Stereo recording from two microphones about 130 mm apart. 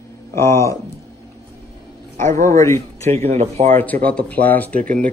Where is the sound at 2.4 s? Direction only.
25° left (ahead or behind).